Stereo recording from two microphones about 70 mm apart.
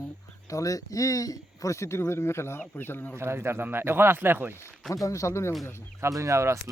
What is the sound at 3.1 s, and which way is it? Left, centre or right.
Speech, right.